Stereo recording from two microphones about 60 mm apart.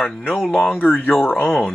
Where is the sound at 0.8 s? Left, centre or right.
Left.